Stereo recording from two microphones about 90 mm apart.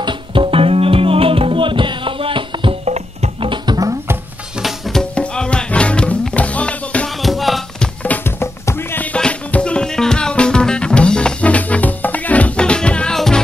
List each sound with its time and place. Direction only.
0.0 s music: 75° right (ahead or behind)
4.6 s music: centre (ahead or behind)
5.1 s music: 10° left (ahead or behind)
7.2 s music: centre (ahead or behind)
8.0 s music: 15° left (ahead or behind)
8.4 s music: 25° left (ahead or behind); by 13.4 s 5° left (ahead or behind)